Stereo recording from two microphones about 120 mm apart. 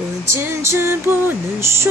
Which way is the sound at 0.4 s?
20° right (ahead or behind).